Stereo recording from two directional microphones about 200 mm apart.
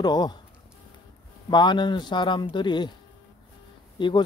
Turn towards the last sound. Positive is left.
turn(degrees=25)  # may be behind; listen again after turning